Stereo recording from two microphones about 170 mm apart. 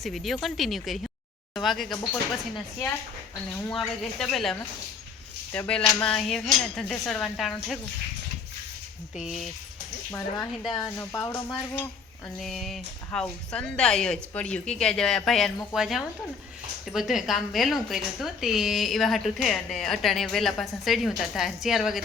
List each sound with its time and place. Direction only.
0.0 s speech: centre (ahead or behind)
3.7 s speech: centre (ahead or behind)
9.1 s speech: centre (ahead or behind)
10.1 s speech: 20° left (ahead or behind)
12.4 s speech: centre (ahead or behind)